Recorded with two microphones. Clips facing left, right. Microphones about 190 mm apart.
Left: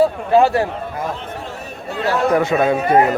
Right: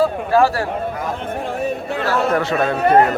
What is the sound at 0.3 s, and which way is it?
Speech, 20° left (ahead or behind).